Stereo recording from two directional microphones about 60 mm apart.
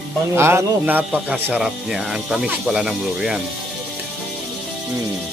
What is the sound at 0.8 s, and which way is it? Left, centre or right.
Speech, right.